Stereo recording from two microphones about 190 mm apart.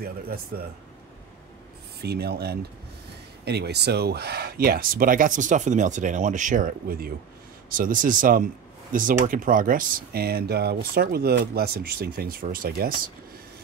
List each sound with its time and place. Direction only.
0.0 s speech: 55° right (ahead or behind)
2.0 s speech: 55° right (ahead or behind)